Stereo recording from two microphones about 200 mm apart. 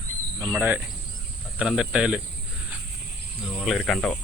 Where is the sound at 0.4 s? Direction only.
10° right (ahead or behind).